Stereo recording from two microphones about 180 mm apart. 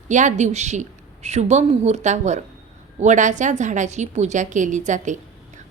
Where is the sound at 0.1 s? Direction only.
45° right (ahead or behind).